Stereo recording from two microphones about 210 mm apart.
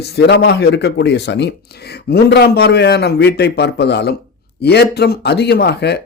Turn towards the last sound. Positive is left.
turn(degrees=50)  # may be behind; listen again after turning